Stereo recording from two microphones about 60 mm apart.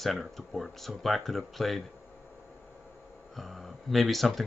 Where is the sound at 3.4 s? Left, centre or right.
Centre.